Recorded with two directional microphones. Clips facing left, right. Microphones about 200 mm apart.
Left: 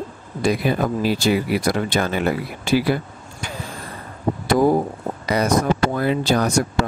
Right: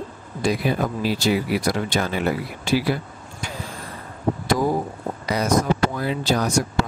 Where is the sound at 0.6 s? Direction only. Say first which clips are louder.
Left 3 dB; 55° left (ahead or behind).